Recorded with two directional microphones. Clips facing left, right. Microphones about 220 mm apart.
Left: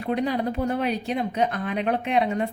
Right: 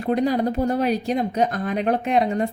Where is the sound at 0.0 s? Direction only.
40° right (ahead or behind).